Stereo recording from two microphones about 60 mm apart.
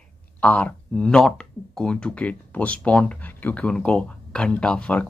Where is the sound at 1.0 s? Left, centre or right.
Centre.